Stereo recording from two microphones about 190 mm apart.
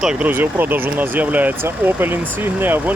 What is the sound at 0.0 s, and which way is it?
Speech, 5° right (ahead or behind).